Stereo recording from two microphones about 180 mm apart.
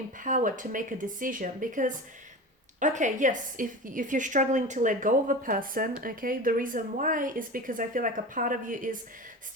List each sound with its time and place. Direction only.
0.2 s a woman's voice: 45° right (ahead or behind)